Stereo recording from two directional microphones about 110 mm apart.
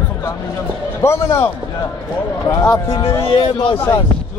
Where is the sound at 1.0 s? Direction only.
25° left (ahead or behind).